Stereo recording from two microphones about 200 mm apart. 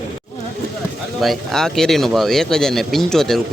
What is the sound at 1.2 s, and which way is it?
Speech, centre (ahead or behind).